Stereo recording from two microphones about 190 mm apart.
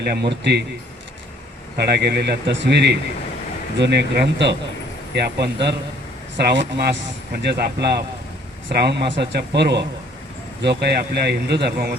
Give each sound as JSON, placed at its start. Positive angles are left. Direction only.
{"t": 0.0, "sound": "speech", "side_deg": -60}
{"t": 1.7, "sound": "speech", "side_deg": -60}